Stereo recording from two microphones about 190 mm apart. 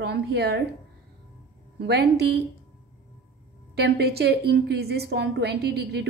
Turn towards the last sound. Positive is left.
turn(degrees=-60)  # may be behind; listen again after turning